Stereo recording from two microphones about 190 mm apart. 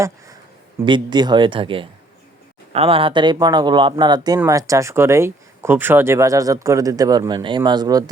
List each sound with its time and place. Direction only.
0.9 s speech: 25° right (ahead or behind)